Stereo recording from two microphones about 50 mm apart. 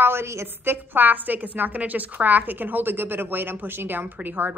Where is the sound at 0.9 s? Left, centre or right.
Right.